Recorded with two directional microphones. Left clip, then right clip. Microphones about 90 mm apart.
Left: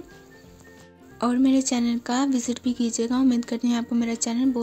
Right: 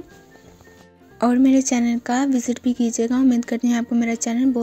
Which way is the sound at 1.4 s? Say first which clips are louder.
Right 3 dB; 40° right (ahead or behind).